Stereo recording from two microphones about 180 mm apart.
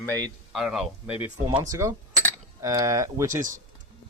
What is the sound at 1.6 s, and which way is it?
Speech, 15° right (ahead or behind).